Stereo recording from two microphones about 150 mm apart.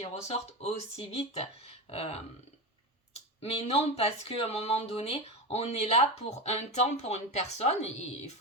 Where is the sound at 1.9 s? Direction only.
40° left (ahead or behind).